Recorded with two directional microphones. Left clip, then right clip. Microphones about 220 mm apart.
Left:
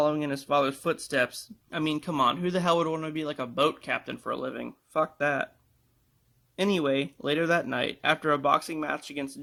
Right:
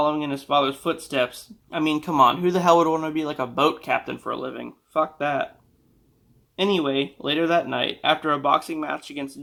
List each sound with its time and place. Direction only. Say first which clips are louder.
0.0 s a man's voice: right 3 dB; 45° left (ahead or behind)
4.2 s speech: right 3 dB; 45° left (ahead or behind)
6.6 s speech: right 4 dB; 45° left (ahead or behind)